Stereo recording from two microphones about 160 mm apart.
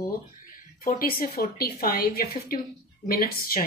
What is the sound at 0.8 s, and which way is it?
A woman's voice, 65° left (ahead or behind).